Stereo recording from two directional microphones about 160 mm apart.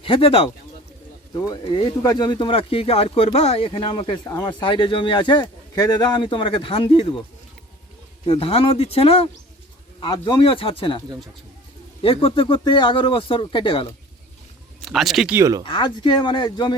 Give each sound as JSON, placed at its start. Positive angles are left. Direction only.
{"t": 0.0, "sound": "a man's voice", "side_deg": 35}
{"t": 1.3, "sound": "a man's voice", "side_deg": 25}
{"t": 8.3, "sound": "a man's voice", "side_deg": 35}
{"t": 12.0, "sound": "a man's voice", "side_deg": 35}
{"t": 14.8, "sound": "speech", "side_deg": 0}
{"t": 15.4, "sound": "speech", "side_deg": -20}
{"t": 15.6, "sound": "speech", "side_deg": 30}